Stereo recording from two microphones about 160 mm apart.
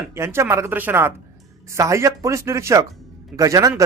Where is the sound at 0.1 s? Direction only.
15° right (ahead or behind).